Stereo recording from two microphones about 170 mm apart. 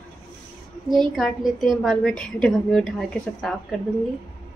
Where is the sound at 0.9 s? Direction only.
Centre (ahead or behind).